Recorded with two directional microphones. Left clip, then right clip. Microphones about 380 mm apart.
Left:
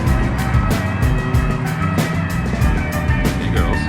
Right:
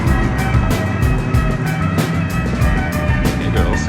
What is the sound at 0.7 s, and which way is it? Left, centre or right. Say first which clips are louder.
Music: right 1 dB; centre.